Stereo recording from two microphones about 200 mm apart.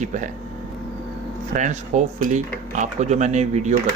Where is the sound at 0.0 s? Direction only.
40° right (ahead or behind).